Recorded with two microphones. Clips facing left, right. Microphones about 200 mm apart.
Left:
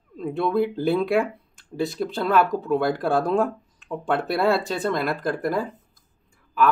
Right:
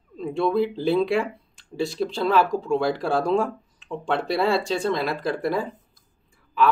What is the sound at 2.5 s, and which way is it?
Speech, centre (ahead or behind).